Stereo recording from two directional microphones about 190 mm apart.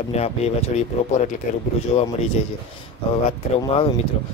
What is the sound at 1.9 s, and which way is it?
Speech, 35° left (ahead or behind).